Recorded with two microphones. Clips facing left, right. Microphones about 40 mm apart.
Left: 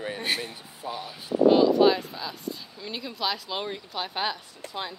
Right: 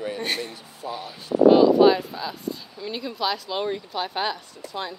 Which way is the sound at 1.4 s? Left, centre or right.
Centre.